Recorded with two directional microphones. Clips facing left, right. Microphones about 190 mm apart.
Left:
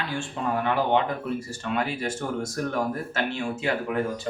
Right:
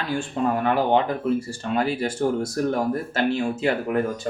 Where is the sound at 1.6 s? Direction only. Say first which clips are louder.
Right 4 dB; 35° right (ahead or behind).